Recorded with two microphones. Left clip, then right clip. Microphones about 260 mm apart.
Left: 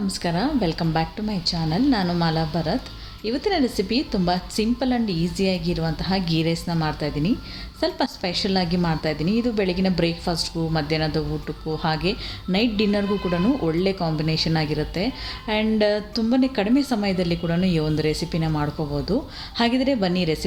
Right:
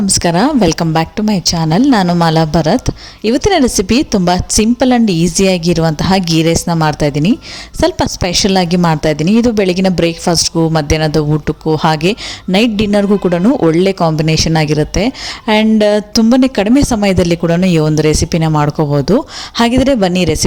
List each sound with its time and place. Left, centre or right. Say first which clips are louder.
0.1 s a woman's voice: right 13 dB; right